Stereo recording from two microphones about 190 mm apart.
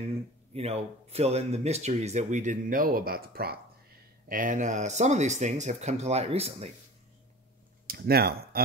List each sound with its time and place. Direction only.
0.0 s speech: 35° right (ahead or behind)
7.8 s speech: 55° right (ahead or behind)